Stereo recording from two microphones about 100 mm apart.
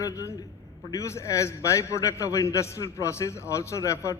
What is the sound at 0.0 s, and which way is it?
A man's voice, 35° left (ahead or behind).